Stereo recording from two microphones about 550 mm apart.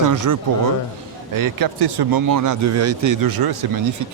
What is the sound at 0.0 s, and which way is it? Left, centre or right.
Speech, right.